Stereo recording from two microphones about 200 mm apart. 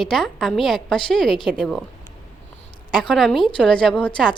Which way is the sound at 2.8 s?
Centre (ahead or behind).